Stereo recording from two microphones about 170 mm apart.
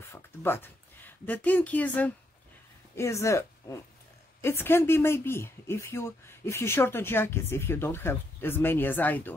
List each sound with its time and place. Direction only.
0.1 s a woman's voice: 15° left (ahead or behind)